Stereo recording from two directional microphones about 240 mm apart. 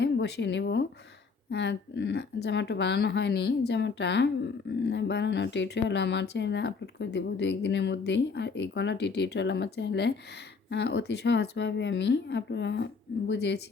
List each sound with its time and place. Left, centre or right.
0.0 s speech: left